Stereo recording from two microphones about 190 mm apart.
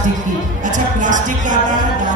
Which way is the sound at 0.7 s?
40° right (ahead or behind).